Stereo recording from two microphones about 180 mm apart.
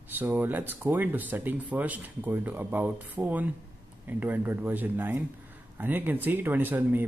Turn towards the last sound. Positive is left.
turn(degrees=-10)  # may be behind; listen again after turning